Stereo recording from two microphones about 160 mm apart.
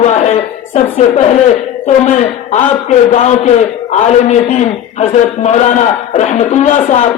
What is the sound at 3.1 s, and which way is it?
Speech, 45° left (ahead or behind).